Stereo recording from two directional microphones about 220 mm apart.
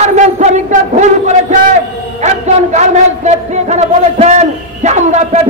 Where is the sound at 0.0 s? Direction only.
30° right (ahead or behind).